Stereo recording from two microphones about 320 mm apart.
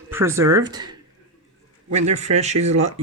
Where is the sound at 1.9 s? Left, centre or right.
Right.